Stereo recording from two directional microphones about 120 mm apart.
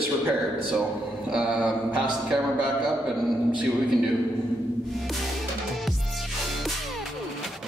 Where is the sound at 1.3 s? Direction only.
10° right (ahead or behind).